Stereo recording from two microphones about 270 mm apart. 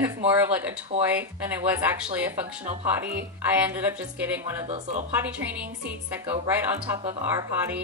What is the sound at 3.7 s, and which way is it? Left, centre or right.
Speech, centre.